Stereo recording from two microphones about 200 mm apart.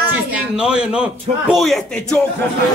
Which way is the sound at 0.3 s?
5° right (ahead or behind).